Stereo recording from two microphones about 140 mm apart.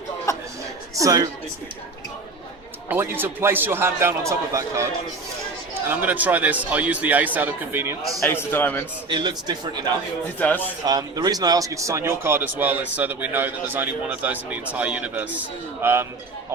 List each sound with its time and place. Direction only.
0.3 s a sound: 20° left (ahead or behind)
0.9 s speech: 25° right (ahead or behind)
2.9 s speech: 15° right (ahead or behind)
5.9 s speech: 10° right (ahead or behind)
8.2 s a man's voice: 15° left (ahead or behind)
9.0 s a man's voice: 35° right (ahead or behind)
10.2 s a man's voice: 10° left (ahead or behind)
10.8 s speech: 30° right (ahead or behind)